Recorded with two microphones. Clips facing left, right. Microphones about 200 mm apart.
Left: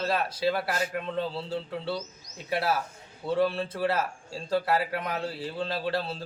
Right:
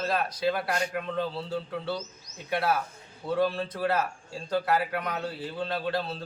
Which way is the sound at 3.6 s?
30° left (ahead or behind).